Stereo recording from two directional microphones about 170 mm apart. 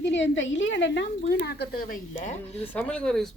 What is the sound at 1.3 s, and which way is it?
Speech, 70° left (ahead or behind).